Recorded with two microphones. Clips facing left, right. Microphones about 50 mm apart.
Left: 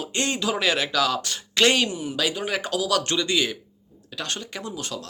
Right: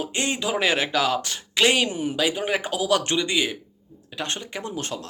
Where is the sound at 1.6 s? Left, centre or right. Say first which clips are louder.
Even; centre.